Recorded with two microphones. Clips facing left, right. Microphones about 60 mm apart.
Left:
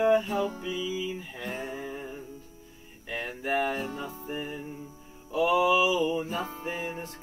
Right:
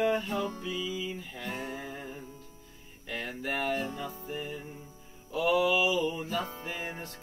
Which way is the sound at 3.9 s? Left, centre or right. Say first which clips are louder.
Left 2 dB; left.